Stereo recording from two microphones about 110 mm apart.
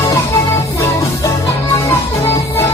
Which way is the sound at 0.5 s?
25° left (ahead or behind).